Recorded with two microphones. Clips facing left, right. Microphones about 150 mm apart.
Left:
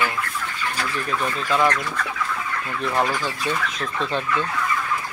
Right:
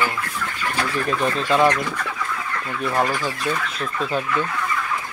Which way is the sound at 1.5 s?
15° right (ahead or behind).